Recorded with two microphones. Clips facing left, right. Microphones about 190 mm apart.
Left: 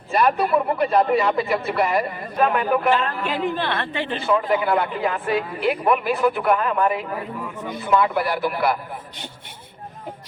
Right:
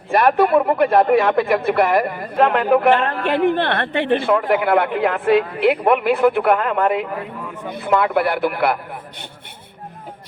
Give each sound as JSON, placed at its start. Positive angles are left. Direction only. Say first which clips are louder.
{"t": 0.1, "sound": "speech", "louder": "right 5 dB", "side_deg": -55}